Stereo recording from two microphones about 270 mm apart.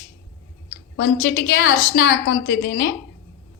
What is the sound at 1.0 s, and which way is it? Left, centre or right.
A woman's voice, left.